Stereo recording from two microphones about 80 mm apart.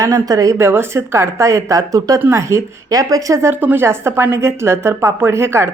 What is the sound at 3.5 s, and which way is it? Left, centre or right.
A woman's voice, right.